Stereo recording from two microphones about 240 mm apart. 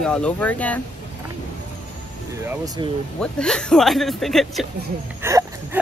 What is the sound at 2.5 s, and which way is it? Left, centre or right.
Speech, centre.